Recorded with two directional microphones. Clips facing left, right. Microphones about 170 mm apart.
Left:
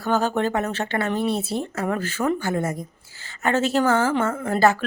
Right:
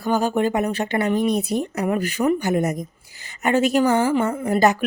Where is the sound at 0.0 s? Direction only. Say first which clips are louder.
Right 2 dB; 10° right (ahead or behind).